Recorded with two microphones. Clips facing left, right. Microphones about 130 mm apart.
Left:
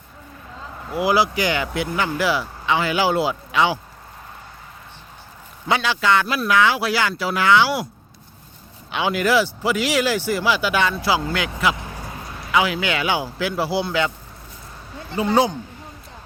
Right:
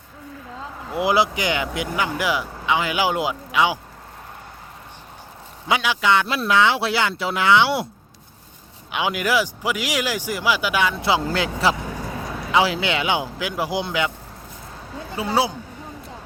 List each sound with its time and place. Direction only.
0.9 s speech: 20° right (ahead or behind)
5.6 s speech: 10° right (ahead or behind)
8.9 s speech: 15° right (ahead or behind)
11.3 s speech: 30° right (ahead or behind); by 14.1 s 15° right (ahead or behind)
15.1 s speech: 5° right (ahead or behind)